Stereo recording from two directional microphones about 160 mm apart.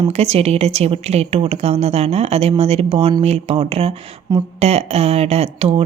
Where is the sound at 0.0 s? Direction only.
40° right (ahead or behind).